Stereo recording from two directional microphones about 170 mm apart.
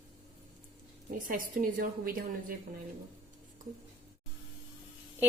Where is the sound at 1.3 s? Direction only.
55° right (ahead or behind).